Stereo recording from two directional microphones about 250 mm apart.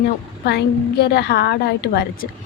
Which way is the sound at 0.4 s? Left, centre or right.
Left.